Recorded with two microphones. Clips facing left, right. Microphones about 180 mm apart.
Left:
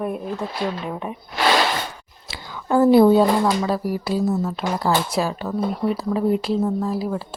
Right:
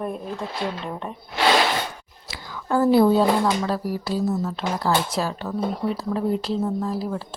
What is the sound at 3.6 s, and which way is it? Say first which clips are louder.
Speech: left 3 dB; 15° left (ahead or behind).